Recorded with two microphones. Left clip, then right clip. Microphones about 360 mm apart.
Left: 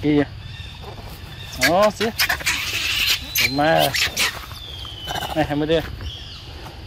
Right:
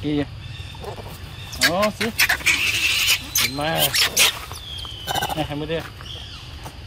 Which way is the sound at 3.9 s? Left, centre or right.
Centre.